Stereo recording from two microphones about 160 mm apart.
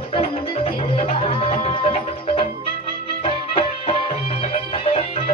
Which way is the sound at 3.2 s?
35° left (ahead or behind).